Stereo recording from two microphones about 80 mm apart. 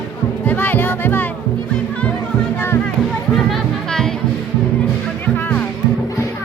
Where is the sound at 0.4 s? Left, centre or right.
Left.